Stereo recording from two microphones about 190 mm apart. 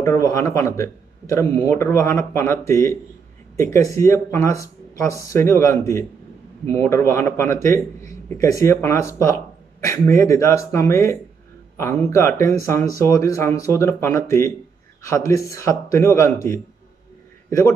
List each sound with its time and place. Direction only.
0.0 s speech: 15° left (ahead or behind)
17.5 s a man's voice: 15° left (ahead or behind)